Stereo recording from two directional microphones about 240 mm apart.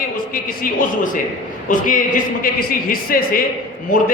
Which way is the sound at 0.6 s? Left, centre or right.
Left.